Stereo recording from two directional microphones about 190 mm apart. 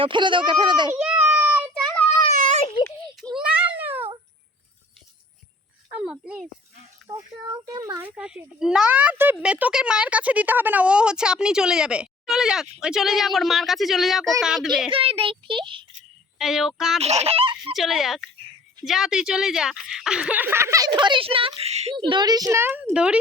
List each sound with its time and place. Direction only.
0.0 s a child's voice: 25° right (ahead or behind)
0.9 s a sound: 5° right (ahead or behind)
3.2 s a sound: centre (ahead or behind)
6.0 s speech: 5° right (ahead or behind)
7.1 s a child's voice: 15° right (ahead or behind)
14.8 s a child's voice: 30° right (ahead or behind)
16.4 s a child's voice: centre (ahead or behind)
17.0 s speech: 35° right (ahead or behind)
17.7 s a child's voice: centre (ahead or behind)